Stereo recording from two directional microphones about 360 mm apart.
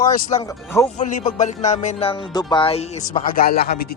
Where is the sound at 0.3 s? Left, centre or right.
Centre.